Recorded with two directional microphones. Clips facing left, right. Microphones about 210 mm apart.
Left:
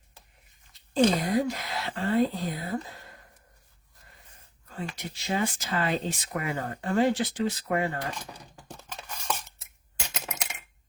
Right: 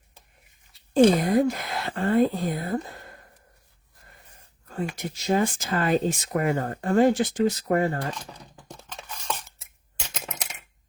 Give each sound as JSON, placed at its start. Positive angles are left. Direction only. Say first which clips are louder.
{"t": 0.9, "sound": "speech", "louder": "right 5 dB", "side_deg": -55}
{"t": 4.7, "sound": "speech", "louder": "right 6 dB", "side_deg": -45}
{"t": 8.9, "sound": "dishes", "louder": "even", "side_deg": 5}